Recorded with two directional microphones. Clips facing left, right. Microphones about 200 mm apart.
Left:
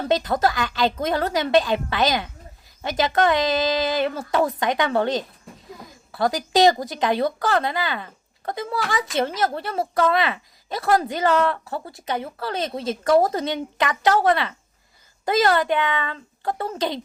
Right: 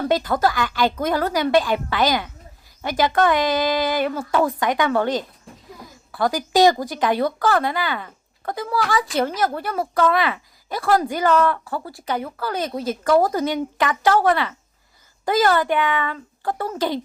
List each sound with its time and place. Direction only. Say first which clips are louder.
0.1 s speech: left 1 dB; 25° left (ahead or behind)